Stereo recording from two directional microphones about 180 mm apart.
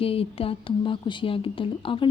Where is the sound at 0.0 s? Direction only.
30° left (ahead or behind).